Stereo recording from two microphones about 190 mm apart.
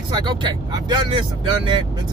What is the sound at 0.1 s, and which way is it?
Speech, 25° right (ahead or behind).